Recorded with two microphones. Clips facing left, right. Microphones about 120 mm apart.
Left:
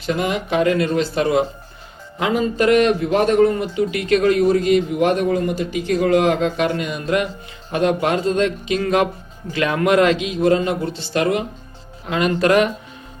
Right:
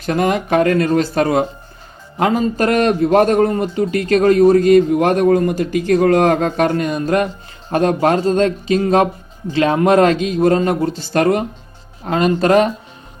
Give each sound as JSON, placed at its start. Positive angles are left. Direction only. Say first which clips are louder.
{"t": 0.0, "sound": "a man's voice", "louder": "right 4 dB", "side_deg": -45}